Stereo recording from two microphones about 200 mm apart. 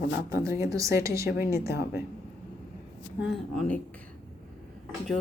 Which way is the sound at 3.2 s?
Centre (ahead or behind).